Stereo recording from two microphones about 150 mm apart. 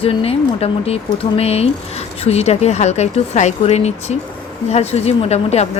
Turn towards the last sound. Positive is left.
turn(degrees=45)  # may be behind; listen again after turning